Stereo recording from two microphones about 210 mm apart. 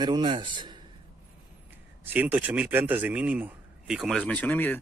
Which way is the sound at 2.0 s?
10° right (ahead or behind).